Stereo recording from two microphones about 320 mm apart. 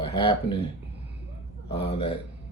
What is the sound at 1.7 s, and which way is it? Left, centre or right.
Speech, centre.